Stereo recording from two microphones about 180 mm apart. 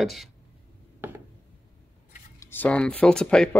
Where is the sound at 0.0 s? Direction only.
Centre (ahead or behind).